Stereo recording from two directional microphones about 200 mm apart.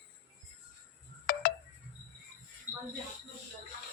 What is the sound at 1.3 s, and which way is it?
Wind chime, 45° left (ahead or behind).